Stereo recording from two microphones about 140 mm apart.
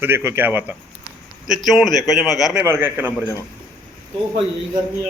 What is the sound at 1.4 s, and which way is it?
A man's voice, 5° right (ahead or behind).